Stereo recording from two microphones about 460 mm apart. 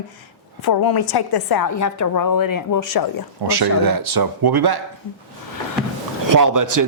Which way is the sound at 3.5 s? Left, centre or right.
Right.